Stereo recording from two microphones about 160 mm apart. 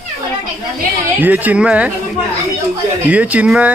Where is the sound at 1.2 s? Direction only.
10° right (ahead or behind).